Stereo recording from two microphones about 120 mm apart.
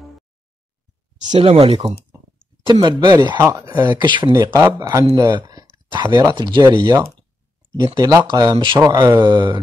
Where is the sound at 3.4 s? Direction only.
25° right (ahead or behind); by 4.3 s 40° right (ahead or behind).